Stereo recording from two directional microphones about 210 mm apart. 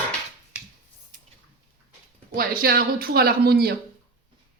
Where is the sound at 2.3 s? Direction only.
45° right (ahead or behind).